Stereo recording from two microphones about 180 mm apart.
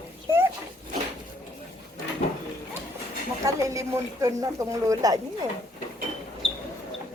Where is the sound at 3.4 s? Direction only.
15° right (ahead or behind).